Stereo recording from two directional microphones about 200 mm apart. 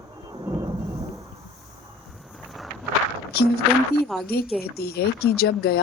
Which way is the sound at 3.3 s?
50° left (ahead or behind).